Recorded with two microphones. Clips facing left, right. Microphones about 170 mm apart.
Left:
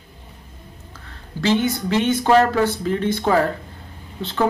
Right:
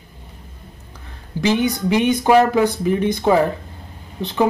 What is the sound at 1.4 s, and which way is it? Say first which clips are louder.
Speech: right 1 dB; 15° right (ahead or behind).